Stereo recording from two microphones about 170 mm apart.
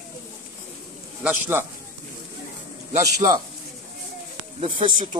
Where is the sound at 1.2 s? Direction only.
15° right (ahead or behind).